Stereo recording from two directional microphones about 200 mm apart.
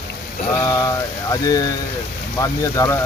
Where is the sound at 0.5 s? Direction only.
15° left (ahead or behind).